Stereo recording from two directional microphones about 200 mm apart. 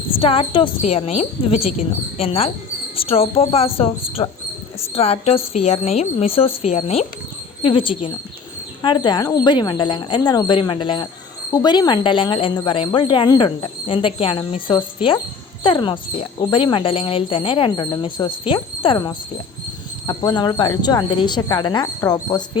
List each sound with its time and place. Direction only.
0.2 s a woman's voice: 30° left (ahead or behind)